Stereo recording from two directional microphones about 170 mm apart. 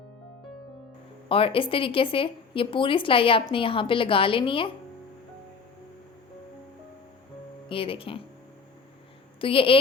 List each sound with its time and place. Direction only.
1.3 s speech: 30° left (ahead or behind)
7.7 s speech: 30° left (ahead or behind)
9.4 s speech: 30° left (ahead or behind)